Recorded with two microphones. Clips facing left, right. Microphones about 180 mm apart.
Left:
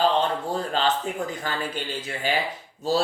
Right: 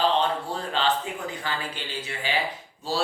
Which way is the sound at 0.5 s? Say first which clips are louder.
Left 3 dB; 40° left (ahead or behind).